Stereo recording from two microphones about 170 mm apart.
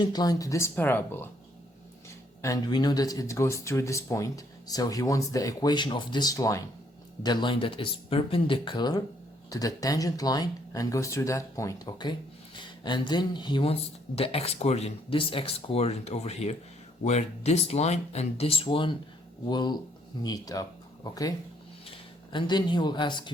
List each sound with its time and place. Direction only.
0.0 s speech: 25° left (ahead or behind)